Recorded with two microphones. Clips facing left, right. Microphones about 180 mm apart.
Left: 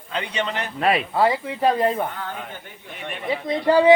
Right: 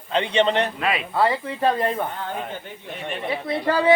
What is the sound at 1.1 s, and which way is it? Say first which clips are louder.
Speech: left 1 dB; 10° left (ahead or behind).